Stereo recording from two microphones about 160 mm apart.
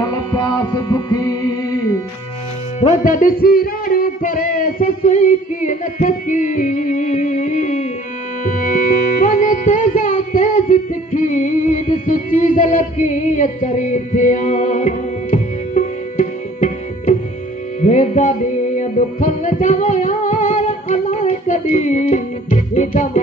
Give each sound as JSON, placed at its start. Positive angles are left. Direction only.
{"t": 0.0, "sound": "music", "side_deg": 25}
{"t": 2.8, "sound": "music", "side_deg": 55}